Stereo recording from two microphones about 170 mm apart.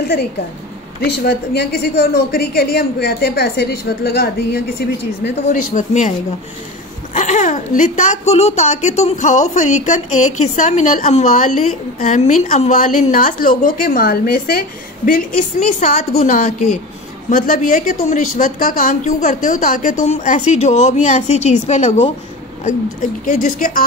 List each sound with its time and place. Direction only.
1.0 s a woman's voice: 70° left (ahead or behind); by 6.1 s 45° left (ahead or behind)
7.2 s a woman's voice: 45° left (ahead or behind)
15.8 s a woman's voice: 40° left (ahead or behind)
23.2 s a woman's voice: 50° left (ahead or behind)